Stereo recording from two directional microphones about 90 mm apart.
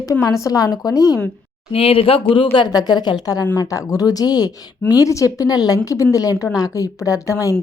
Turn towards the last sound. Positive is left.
turn(degrees=35)  # may be behind; listen again after turning